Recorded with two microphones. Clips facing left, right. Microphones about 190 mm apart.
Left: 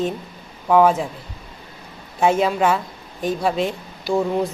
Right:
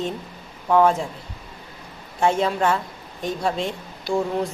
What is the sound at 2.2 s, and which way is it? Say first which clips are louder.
A woman's voice: left 3 dB; 5° left (ahead or behind).